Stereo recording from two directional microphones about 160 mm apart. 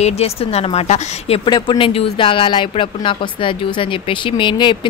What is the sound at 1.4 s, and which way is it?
Speech, 30° left (ahead or behind).